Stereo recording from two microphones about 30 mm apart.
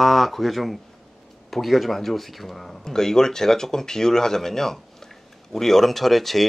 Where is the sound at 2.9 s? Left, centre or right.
Centre.